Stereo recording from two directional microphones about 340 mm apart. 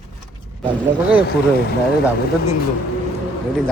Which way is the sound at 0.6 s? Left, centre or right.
Centre.